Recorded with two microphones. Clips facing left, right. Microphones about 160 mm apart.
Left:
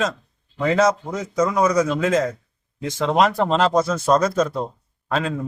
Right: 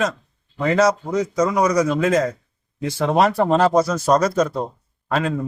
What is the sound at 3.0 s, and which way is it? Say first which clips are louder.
A man's voice: right 1 dB; 20° right (ahead or behind).